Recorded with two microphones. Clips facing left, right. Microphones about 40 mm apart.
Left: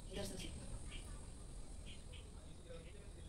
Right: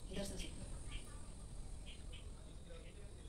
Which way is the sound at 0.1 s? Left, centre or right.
Centre.